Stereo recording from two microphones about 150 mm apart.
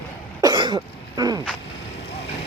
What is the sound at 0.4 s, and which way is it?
Cough, 30° right (ahead or behind).